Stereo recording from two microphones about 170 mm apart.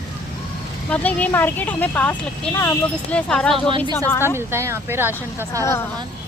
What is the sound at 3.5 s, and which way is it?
Speech, 30° right (ahead or behind).